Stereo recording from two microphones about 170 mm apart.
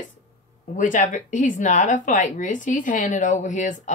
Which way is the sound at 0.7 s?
50° left (ahead or behind).